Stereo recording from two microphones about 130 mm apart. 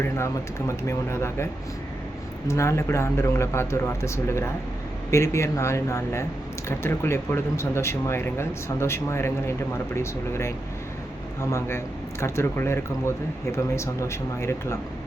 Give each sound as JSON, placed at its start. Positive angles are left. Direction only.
{"t": 0.9, "sound": "speech", "side_deg": 20}
{"t": 2.5, "sound": "speech", "side_deg": 20}